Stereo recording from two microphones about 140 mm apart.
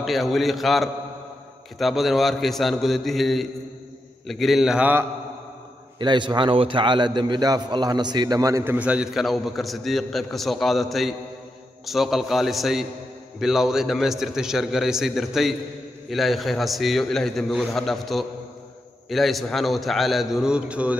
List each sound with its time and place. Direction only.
0.0 s a man's voice: centre (ahead or behind)
5.9 s a man's voice: 35° right (ahead or behind)
8.7 s a man's voice: 10° right (ahead or behind)